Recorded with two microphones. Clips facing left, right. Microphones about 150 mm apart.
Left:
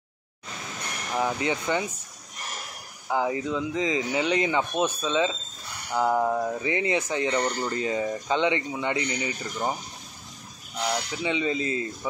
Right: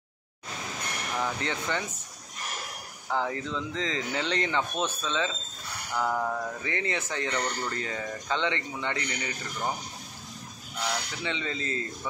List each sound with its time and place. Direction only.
1.1 s speech: 15° left (ahead or behind)
3.1 s speech: 10° left (ahead or behind)
11.2 s speech: 15° left (ahead or behind)